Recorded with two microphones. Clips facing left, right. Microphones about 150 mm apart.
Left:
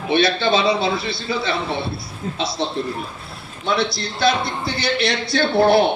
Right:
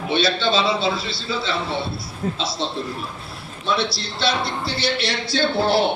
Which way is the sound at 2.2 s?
60° right (ahead or behind).